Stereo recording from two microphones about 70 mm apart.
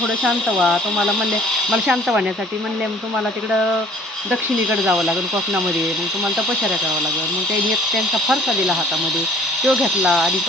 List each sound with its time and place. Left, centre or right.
0.2 s speech: centre
1.7 s speech: centre
4.3 s speech: centre
7.9 s speech: centre